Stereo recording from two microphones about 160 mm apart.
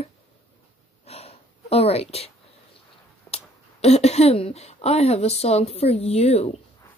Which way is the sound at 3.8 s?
40° left (ahead or behind).